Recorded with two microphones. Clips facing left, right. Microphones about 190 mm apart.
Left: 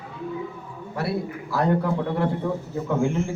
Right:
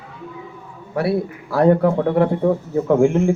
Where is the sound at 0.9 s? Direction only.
60° right (ahead or behind).